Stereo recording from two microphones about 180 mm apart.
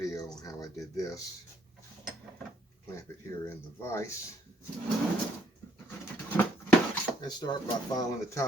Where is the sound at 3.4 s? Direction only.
15° left (ahead or behind).